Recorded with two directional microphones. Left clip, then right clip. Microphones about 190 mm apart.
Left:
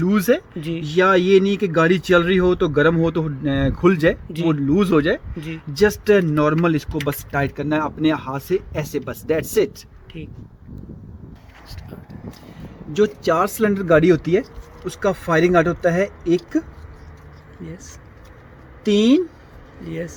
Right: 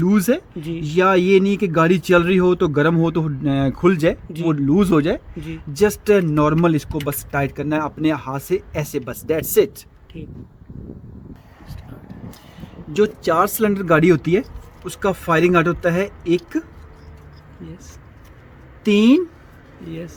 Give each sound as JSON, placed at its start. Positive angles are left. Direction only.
{"t": 0.0, "sound": "speech", "side_deg": -50}
{"t": 0.6, "sound": "speech", "side_deg": 5}
{"t": 0.9, "sound": "speech", "side_deg": -55}
{"t": 10.1, "sound": "speech", "side_deg": 5}
{"t": 12.9, "sound": "speech", "side_deg": -35}
{"t": 18.9, "sound": "speech", "side_deg": -45}
{"t": 19.9, "sound": "speech", "side_deg": 15}